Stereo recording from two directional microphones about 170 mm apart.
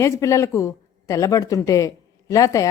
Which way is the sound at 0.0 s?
15° left (ahead or behind).